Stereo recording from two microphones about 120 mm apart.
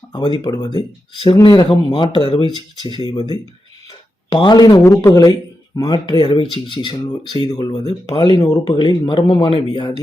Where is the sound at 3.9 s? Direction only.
40° left (ahead or behind).